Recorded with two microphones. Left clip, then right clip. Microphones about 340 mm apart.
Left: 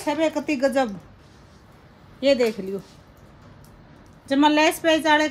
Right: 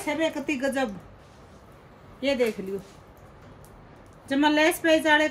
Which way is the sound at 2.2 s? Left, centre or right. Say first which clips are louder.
Left 6 dB; centre.